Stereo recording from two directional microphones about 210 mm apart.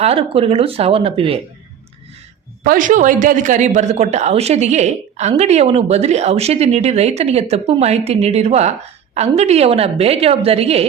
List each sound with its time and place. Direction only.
0.0 s a woman's voice: 25° right (ahead or behind)
2.6 s a woman's voice: 40° right (ahead or behind)